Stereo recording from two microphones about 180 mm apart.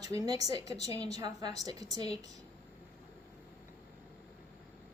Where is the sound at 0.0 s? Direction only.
20° right (ahead or behind).